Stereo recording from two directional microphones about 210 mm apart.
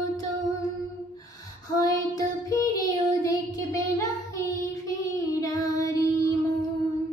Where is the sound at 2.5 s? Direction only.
15° left (ahead or behind).